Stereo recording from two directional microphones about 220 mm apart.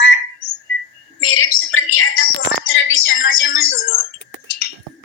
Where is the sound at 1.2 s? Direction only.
75° left (ahead or behind).